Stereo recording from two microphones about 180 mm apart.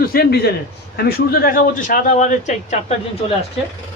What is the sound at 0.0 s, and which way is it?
A man's voice, 55° left (ahead or behind).